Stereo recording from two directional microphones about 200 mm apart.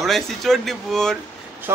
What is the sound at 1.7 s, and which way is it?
Speech, 10° right (ahead or behind).